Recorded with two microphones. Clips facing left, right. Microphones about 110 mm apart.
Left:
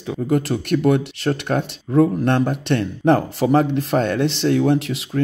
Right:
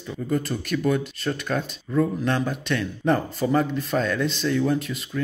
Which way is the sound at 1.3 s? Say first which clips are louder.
Left 6 dB; 55° left (ahead or behind).